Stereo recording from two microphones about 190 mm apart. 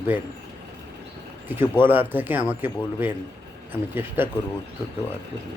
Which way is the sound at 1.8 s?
10° right (ahead or behind).